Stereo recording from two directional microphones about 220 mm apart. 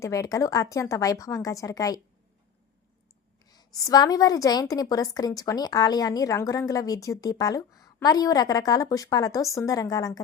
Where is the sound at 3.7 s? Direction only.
15° left (ahead or behind).